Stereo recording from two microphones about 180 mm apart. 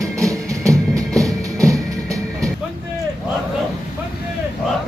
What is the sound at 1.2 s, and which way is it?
Music, 20° right (ahead or behind).